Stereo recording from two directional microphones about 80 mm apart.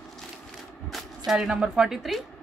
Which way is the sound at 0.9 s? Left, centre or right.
Centre.